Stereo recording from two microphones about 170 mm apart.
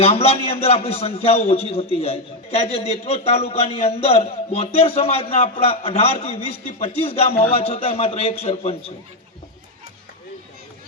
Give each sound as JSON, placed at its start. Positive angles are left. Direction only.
{"t": 0.0, "sound": "a man's voice", "side_deg": 35}